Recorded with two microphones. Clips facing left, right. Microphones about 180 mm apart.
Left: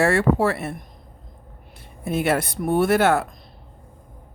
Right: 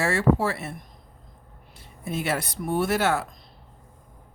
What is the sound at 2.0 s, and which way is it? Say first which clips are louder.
Speech: left 6 dB; 55° left (ahead or behind).